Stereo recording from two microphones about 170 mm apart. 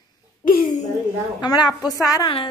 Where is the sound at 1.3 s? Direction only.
25° left (ahead or behind).